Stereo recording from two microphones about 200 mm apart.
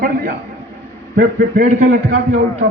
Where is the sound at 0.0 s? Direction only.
45° right (ahead or behind).